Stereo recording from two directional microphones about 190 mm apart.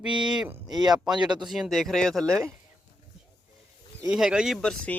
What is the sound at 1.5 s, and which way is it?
Speech, centre (ahead or behind).